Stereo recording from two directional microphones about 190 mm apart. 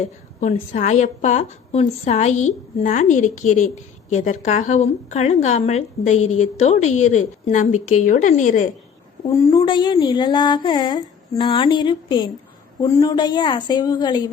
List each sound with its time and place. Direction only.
0.0 s a woman's voice: 40° left (ahead or behind)
9.3 s mantra: 15° left (ahead or behind)